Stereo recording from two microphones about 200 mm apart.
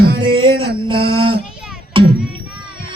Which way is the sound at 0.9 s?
25° right (ahead or behind).